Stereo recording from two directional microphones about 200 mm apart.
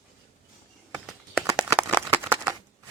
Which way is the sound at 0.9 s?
5° right (ahead or behind).